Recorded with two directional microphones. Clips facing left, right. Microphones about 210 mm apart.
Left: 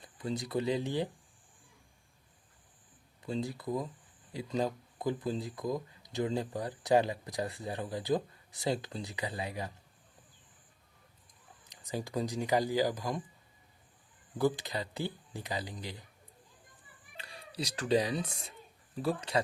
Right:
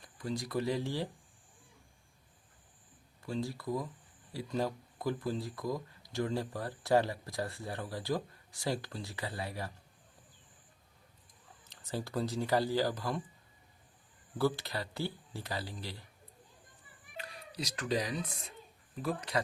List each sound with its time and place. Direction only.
0.0 s speech: 25° left (ahead or behind)
3.2 s speech: 20° left (ahead or behind)
11.6 s speech: 15° left (ahead or behind)
14.3 s speech: 15° left (ahead or behind)
17.2 s speech: 30° left (ahead or behind)